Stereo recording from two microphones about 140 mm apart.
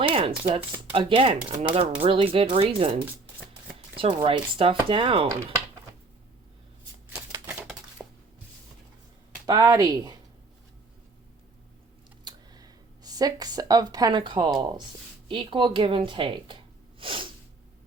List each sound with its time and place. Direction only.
0.0 s chopping: 40° right (ahead or behind)
0.9 s speech: 40° right (ahead or behind)
8.0 s a sound: centre (ahead or behind)
9.5 s speech: 25° right (ahead or behind)
12.2 s speech: 30° right (ahead or behind)
17.0 s sneeze: 40° right (ahead or behind)